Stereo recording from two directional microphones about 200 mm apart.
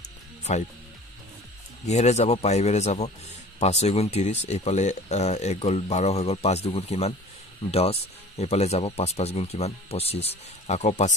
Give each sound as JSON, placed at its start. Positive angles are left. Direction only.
{"t": 0.4, "sound": "music", "side_deg": 35}
{"t": 1.9, "sound": "speech", "side_deg": 35}